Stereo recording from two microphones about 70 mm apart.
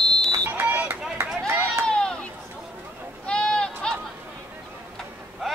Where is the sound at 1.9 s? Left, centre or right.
Centre.